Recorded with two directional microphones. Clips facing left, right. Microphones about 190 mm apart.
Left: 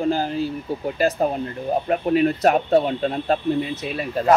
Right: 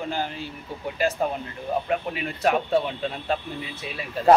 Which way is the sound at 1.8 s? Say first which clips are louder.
Left 9 dB; 40° left (ahead or behind).